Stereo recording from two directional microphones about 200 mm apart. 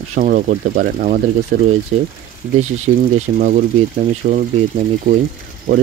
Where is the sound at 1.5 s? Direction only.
55° right (ahead or behind).